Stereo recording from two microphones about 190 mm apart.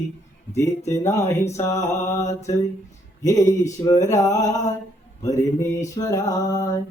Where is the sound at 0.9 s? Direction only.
15° left (ahead or behind).